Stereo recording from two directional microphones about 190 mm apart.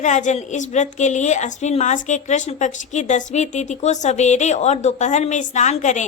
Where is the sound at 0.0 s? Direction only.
40° left (ahead or behind).